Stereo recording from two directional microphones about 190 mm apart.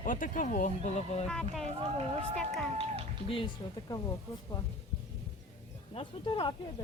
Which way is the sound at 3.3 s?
25° left (ahead or behind).